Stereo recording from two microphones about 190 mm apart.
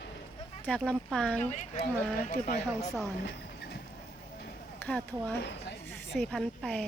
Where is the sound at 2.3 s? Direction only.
50° left (ahead or behind).